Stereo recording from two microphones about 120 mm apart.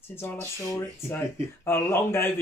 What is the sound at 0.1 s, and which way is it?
Speech, 20° left (ahead or behind).